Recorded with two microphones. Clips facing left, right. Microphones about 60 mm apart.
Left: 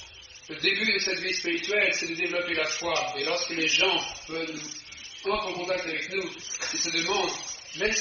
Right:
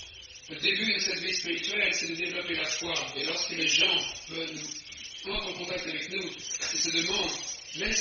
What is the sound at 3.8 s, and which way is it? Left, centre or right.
Speech, left.